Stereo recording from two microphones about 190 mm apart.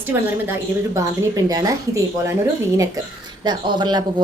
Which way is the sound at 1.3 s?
20° right (ahead or behind).